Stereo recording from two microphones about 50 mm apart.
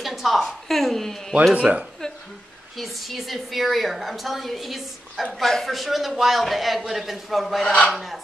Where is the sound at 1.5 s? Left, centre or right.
Right.